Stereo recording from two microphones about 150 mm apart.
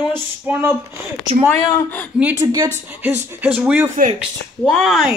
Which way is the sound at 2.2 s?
10° right (ahead or behind).